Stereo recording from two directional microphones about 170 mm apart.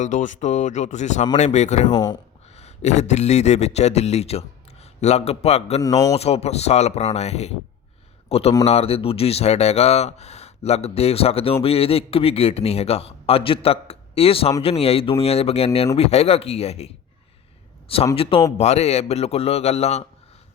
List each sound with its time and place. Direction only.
0.0 s speech: 45° left (ahead or behind)
1.9 s speech: 25° left (ahead or behind)
2.6 s a man's voice: 40° left (ahead or behind)